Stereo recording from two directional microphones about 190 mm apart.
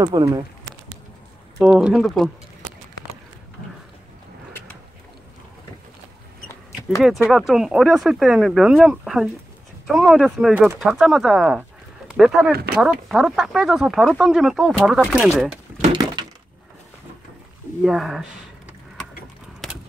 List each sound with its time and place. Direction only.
0.0 s speech: 20° right (ahead or behind)
1.6 s speech: 5° right (ahead or behind)
7.2 s speech: centre (ahead or behind)
15.9 s a sound: 25° right (ahead or behind)
17.8 s speech: centre (ahead or behind)